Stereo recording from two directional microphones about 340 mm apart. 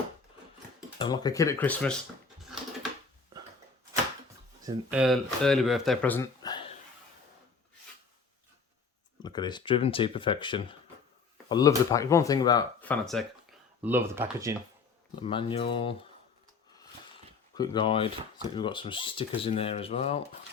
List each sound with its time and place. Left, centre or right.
0.9 s speech: centre
4.6 s speech: centre
9.2 s speech: centre
15.2 s speech: centre
17.5 s speech: centre